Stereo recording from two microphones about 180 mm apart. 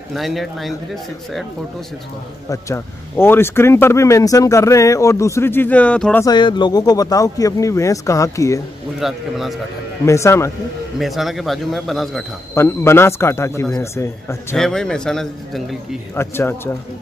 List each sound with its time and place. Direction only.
0.1 s a man's voice: centre (ahead or behind)
2.5 s speech: 15° left (ahead or behind)
6.2 s speech: 25° left (ahead or behind)
9.0 s a man's voice: centre (ahead or behind)
10.0 s speech: 15° left (ahead or behind)
11.0 s a man's voice: centre (ahead or behind)
12.5 s speech: 15° left (ahead or behind)
14.6 s a man's voice: 5° left (ahead or behind)
16.2 s speech: 15° left (ahead or behind)